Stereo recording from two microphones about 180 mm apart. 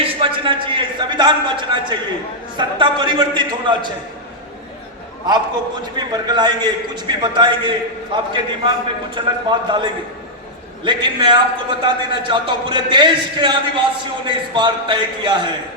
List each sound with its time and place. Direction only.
0.0 s a sound: 30° right (ahead or behind)
2.6 s a man's voice: 25° right (ahead or behind)
6.0 s a man's voice: 25° right (ahead or behind)